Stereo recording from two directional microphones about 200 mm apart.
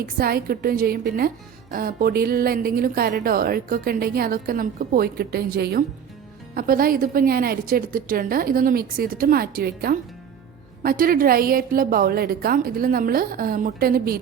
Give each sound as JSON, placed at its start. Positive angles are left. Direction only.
{"t": 0.0, "sound": "speech", "side_deg": -50}